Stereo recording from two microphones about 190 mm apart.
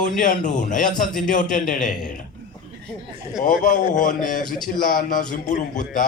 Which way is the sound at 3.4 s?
45° left (ahead or behind).